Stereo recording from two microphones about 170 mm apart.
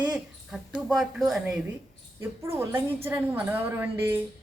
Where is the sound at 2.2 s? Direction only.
15° right (ahead or behind).